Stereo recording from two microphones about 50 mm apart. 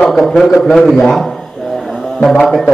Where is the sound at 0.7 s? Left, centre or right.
Centre.